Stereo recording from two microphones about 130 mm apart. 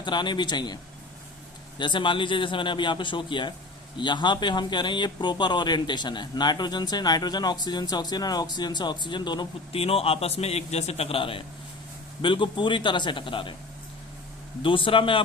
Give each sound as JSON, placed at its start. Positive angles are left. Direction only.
{"t": 0.0, "sound": "speech", "side_deg": 35}
{"t": 1.8, "sound": "speech", "side_deg": 40}
{"t": 9.7, "sound": "a man's voice", "side_deg": 50}
{"t": 14.6, "sound": "speech", "side_deg": 40}